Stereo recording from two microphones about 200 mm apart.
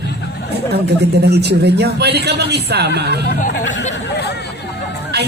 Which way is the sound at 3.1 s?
45° left (ahead or behind).